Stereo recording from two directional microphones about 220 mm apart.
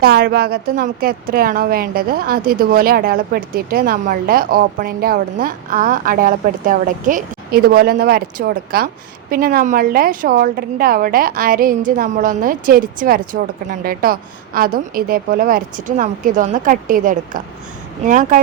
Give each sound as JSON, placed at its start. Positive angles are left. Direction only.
{"t": 0.0, "sound": "a woman's voice", "side_deg": -45}